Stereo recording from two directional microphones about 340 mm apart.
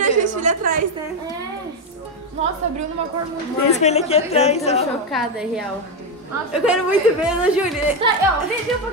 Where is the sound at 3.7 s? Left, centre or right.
Centre.